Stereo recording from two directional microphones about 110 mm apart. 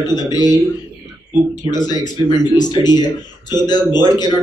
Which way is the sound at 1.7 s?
40° left (ahead or behind).